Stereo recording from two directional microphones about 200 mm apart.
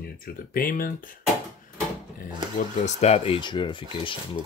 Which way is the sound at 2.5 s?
35° left (ahead or behind).